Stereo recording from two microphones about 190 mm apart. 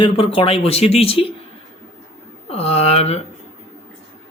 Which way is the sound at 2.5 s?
30° left (ahead or behind).